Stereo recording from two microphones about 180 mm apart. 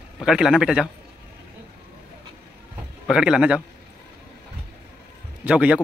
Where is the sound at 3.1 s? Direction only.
5° right (ahead or behind).